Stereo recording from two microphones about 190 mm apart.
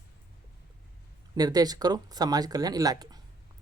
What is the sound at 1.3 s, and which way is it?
Speech, 20° right (ahead or behind).